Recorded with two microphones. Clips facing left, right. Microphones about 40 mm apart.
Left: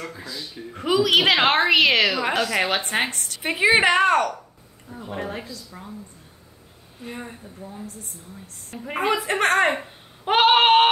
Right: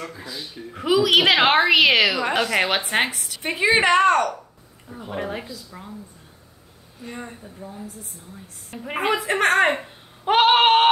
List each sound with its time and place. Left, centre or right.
0.2 s a woman's voice: centre
0.6 s a woman's voice: centre
3.4 s a woman's voice: centre
4.8 s a woman's voice: centre
7.1 s a woman's voice: centre
8.6 s a woman's voice: centre